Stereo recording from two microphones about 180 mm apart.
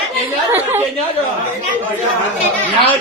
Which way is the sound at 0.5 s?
10° right (ahead or behind).